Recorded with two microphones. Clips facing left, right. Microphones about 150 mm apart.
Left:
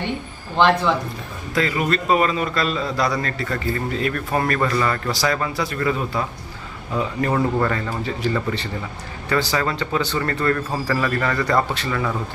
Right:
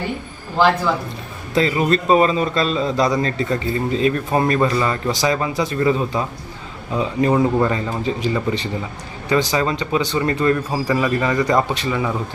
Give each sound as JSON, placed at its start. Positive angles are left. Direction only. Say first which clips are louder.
{"t": 1.5, "sound": "a man's voice", "louder": "right 4 dB", "side_deg": -25}